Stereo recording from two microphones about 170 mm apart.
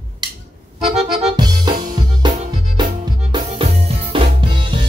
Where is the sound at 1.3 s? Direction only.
25° right (ahead or behind).